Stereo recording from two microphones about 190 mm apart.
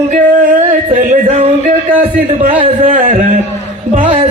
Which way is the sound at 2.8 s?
40° right (ahead or behind).